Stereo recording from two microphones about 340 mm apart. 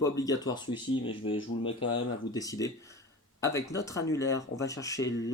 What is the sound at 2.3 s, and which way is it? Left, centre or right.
Speech, centre.